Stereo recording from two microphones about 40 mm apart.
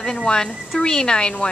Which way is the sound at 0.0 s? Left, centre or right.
Centre.